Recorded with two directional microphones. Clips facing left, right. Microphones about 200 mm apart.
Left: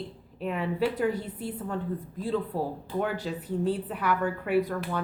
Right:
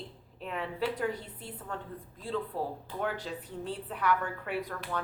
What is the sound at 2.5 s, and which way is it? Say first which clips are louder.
Speech: left 4 dB; 40° left (ahead or behind).